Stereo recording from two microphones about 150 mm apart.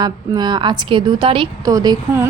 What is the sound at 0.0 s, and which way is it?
A woman's voice, 30° right (ahead or behind).